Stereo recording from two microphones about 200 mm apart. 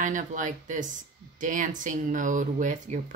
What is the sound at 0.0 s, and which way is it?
Speech, 40° right (ahead or behind).